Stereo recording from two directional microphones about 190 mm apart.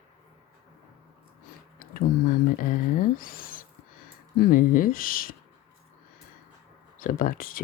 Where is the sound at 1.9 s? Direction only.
45° left (ahead or behind).